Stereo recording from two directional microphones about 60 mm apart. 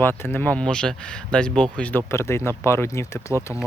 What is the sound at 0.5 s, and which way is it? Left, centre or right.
Speech, centre.